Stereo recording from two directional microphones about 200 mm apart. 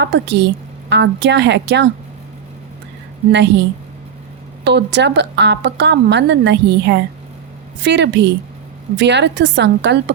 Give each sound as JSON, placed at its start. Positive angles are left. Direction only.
{"t": 0.0, "sound": "a woman's voice", "side_deg": -60}
{"t": 3.3, "sound": "a woman's voice", "side_deg": -60}